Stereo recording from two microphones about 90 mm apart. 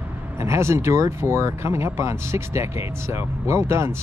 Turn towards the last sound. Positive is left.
turn(degrees=-30)  # may be behind; listen again after turning